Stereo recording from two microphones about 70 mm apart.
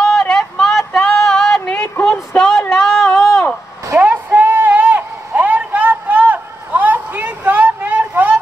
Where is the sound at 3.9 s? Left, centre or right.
Right.